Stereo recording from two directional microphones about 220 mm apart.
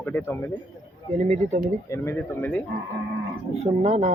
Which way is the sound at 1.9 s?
10° left (ahead or behind).